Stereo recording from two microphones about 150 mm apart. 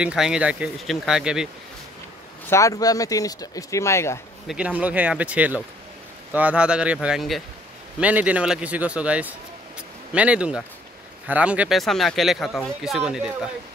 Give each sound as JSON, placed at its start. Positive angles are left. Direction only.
{"t": 0.0, "sound": "speech", "side_deg": -5}
{"t": 2.5, "sound": "speech", "side_deg": 20}
{"t": 4.5, "sound": "a man's voice", "side_deg": -5}